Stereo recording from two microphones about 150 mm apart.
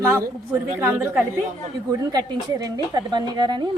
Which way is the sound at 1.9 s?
25° right (ahead or behind).